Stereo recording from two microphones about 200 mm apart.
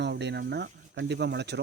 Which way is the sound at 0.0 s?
60° right (ahead or behind).